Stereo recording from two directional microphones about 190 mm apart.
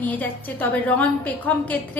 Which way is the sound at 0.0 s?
10° left (ahead or behind).